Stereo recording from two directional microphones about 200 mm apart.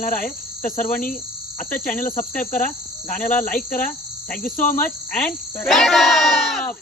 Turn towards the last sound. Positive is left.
turn(degrees=0)  # may be behind; listen again after turning